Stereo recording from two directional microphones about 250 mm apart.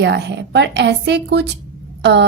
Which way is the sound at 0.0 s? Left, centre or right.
Right.